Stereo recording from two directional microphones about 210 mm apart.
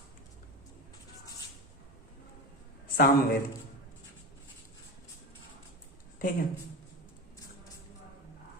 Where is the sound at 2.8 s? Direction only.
45° left (ahead or behind).